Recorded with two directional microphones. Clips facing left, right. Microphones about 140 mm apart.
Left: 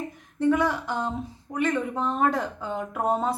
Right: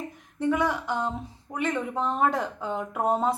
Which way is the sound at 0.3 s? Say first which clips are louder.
Left 3 dB; 15° right (ahead or behind).